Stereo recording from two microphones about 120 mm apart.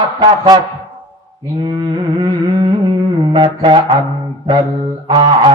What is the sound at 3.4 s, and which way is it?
Music, 45° right (ahead or behind).